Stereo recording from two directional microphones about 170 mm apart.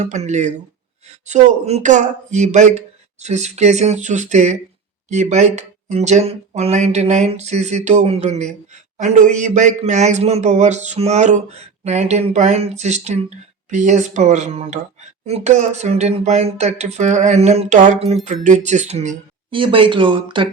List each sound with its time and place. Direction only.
0.0 s a man's voice: 45° right (ahead or behind)